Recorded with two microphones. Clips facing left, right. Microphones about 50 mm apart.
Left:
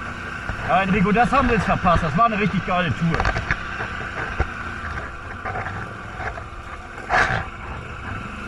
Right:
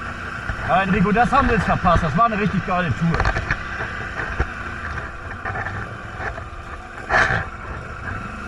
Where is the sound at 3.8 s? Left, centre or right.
Right.